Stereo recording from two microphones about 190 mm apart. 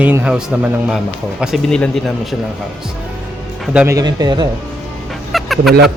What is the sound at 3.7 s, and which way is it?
Speech, 15° right (ahead or behind).